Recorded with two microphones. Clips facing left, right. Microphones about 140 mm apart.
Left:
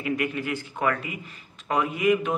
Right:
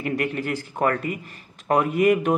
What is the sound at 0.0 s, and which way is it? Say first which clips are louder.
Speech: right 2 dB; 40° right (ahead or behind).